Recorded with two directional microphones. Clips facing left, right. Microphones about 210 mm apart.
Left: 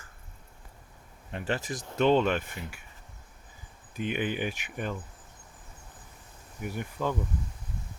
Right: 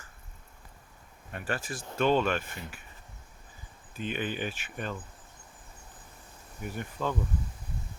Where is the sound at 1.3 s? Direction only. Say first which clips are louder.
Left 3 dB; 20° left (ahead or behind).